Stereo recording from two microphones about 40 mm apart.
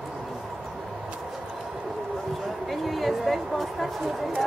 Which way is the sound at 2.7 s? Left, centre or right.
Centre.